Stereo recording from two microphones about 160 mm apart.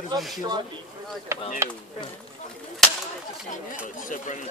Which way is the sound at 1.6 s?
15° right (ahead or behind).